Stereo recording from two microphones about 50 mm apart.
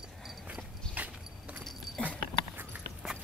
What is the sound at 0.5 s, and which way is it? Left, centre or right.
Clip-clop, right.